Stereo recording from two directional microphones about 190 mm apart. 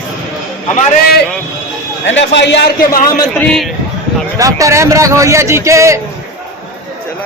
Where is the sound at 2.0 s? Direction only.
70° left (ahead or behind).